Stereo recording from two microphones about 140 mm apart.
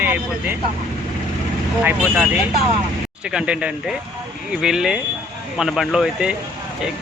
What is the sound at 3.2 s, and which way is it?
Speech, 5° right (ahead or behind).